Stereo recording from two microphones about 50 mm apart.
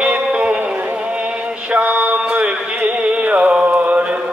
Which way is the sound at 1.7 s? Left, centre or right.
Right.